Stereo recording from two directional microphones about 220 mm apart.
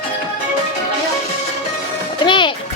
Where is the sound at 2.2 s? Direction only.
20° left (ahead or behind).